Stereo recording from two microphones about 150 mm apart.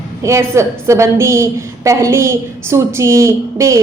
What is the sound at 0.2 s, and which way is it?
A woman's voice, 20° right (ahead or behind).